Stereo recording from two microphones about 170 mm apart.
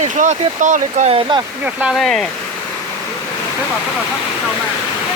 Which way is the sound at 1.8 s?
Centre (ahead or behind).